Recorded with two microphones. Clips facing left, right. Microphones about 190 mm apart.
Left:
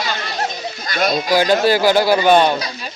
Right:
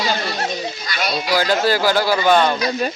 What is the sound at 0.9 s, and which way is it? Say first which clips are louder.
Speech: left 8 dB; 45° left (ahead or behind).